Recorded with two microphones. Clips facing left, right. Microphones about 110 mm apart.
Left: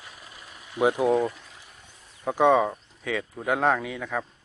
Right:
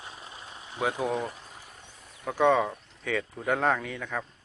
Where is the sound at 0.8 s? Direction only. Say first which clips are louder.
Left 7 dB; 20° left (ahead or behind).